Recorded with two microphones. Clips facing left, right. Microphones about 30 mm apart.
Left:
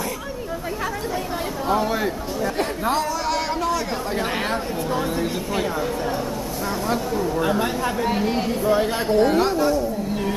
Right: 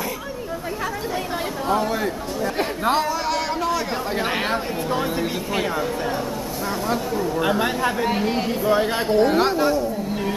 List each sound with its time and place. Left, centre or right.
1.7 s speech: centre
2.4 s speech: centre
3.3 s a sound: centre
3.7 s speech: centre
7.3 s speech: right